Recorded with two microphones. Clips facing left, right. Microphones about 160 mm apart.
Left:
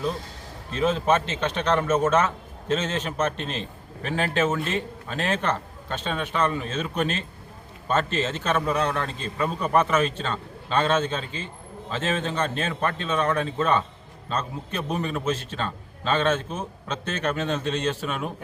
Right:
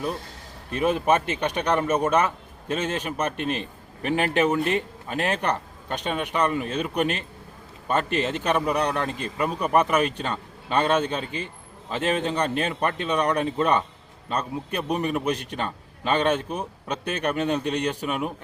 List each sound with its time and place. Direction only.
0.8 s a man's voice: 15° right (ahead or behind)